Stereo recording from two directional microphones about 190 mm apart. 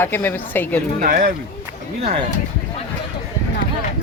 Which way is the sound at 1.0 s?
50° right (ahead or behind).